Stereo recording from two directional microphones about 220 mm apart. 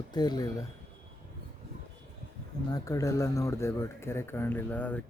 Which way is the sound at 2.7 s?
15° left (ahead or behind).